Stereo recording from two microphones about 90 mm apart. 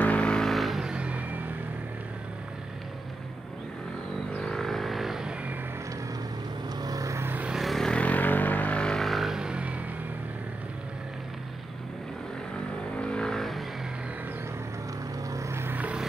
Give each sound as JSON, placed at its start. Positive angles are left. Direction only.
{"t": 0.0, "sound": "vehicle", "side_deg": 15}
{"t": 4.4, "sound": "vehicle", "side_deg": 5}
{"t": 6.8, "sound": "vehicle", "side_deg": -40}
{"t": 7.5, "sound": "vehicle", "side_deg": 0}
{"t": 13.0, "sound": "vehicle", "side_deg": 10}
{"t": 15.3, "sound": "vehicle", "side_deg": -30}